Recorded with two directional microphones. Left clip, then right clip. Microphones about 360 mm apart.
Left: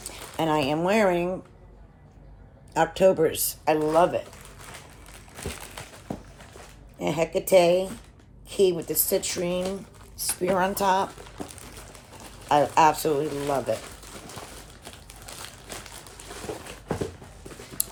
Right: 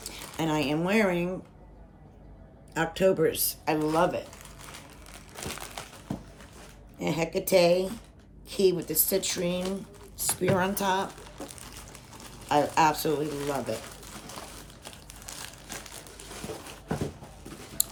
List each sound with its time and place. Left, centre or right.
0.0 s speech: centre
2.7 s speech: centre
7.0 s speech: centre
15.3 s crumpling: centre